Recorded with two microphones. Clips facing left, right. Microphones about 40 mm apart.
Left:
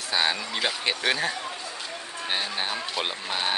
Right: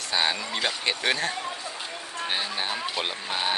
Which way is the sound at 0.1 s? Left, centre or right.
Centre.